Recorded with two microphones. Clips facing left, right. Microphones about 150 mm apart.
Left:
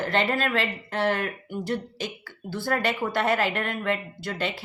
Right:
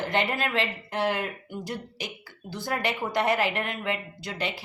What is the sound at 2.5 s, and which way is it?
Speech, 15° right (ahead or behind).